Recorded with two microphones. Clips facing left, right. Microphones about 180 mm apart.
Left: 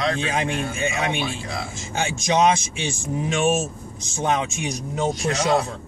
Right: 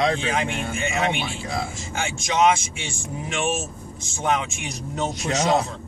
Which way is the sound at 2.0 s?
20° left (ahead or behind).